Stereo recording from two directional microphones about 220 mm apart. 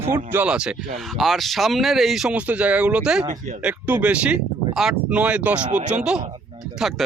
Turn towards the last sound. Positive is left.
turn(degrees=0)  # may be behind; listen again after turning